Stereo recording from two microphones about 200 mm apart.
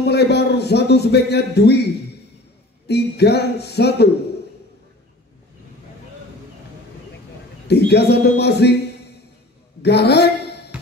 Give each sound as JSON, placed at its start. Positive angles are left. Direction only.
{"t": 0.0, "sound": "a man's voice", "side_deg": 55}
{"t": 2.9, "sound": "speech", "side_deg": 55}
{"t": 7.6, "sound": "speech", "side_deg": 55}
{"t": 9.8, "sound": "a woman's voice", "side_deg": 55}